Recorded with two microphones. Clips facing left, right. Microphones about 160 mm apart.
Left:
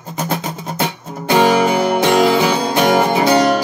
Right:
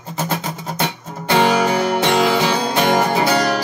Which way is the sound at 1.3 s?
15° left (ahead or behind).